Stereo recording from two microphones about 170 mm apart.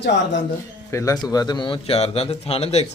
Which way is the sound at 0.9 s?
20° left (ahead or behind).